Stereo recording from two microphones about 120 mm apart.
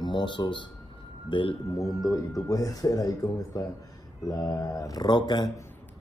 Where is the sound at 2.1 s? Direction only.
30° left (ahead or behind).